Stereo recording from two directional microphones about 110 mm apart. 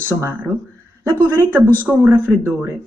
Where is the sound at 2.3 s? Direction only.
20° right (ahead or behind).